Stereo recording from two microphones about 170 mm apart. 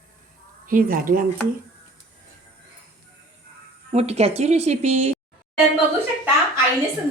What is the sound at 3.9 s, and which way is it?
Speech, 40° right (ahead or behind).